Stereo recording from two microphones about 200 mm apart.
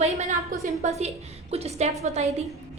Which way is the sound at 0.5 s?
45° right (ahead or behind).